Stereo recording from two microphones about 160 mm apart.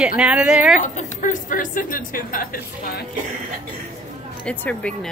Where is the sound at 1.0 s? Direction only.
55° left (ahead or behind).